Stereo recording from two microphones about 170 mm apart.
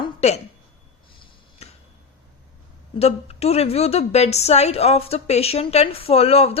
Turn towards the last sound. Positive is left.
turn(degrees=35)  # may be behind; listen again after turning